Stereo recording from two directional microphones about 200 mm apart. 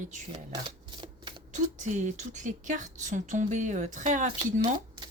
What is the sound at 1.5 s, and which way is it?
A woman's voice, 35° right (ahead or behind).